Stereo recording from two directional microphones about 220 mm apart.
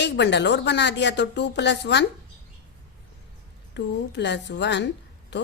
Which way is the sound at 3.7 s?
50° left (ahead or behind).